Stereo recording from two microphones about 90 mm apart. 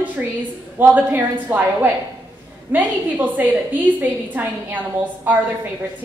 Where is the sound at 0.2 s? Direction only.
15° right (ahead or behind).